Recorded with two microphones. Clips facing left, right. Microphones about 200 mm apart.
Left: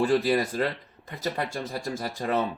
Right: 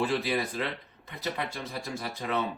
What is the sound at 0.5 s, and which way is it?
Speech, 45° left (ahead or behind).